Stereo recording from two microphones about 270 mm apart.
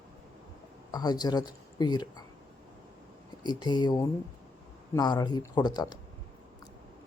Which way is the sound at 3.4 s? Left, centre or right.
Centre.